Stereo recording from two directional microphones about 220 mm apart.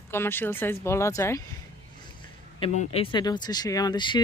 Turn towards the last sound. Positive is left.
turn(degrees=20)  # may be behind; listen again after turning